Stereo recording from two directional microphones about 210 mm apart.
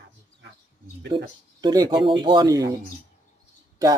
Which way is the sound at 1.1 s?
25° right (ahead or behind).